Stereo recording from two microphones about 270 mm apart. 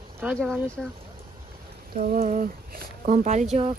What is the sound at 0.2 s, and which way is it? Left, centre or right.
Speech, centre.